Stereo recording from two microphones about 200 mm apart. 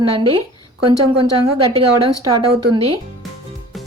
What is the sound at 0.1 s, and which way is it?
Speech, 25° right (ahead or behind).